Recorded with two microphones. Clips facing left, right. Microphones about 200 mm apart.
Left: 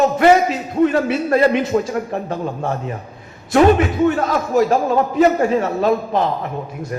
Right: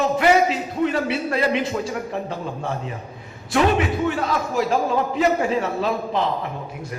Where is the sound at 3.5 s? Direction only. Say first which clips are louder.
Left 6 dB; 45° left (ahead or behind).